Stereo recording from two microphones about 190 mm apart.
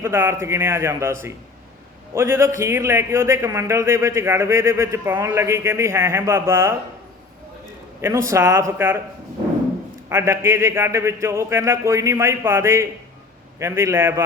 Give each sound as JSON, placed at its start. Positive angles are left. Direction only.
{"t": 0.0, "sound": "a man's voice", "side_deg": -15}
{"t": 8.3, "sound": "a man's voice", "side_deg": -15}
{"t": 10.1, "sound": "a man's voice", "side_deg": -10}